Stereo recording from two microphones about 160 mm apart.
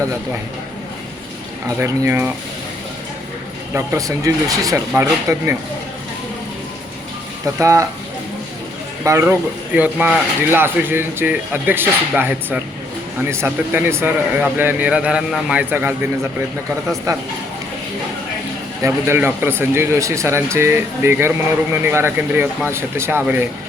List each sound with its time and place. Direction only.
1.8 s speech: 15° right (ahead or behind)
3.8 s speech: 20° right (ahead or behind)
7.4 s speech: 20° right (ahead or behind)
9.0 s speech: 15° right (ahead or behind)
17.1 s speech: 20° right (ahead or behind)
18.8 s speech: 15° right (ahead or behind)